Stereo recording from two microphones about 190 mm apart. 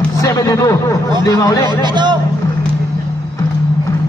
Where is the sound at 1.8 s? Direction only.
25° right (ahead or behind).